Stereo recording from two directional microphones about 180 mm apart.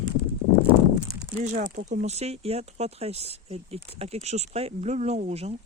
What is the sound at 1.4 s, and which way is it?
Speech, 40° right (ahead or behind).